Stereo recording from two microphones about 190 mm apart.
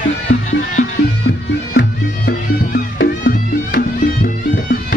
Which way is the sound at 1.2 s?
55° left (ahead or behind).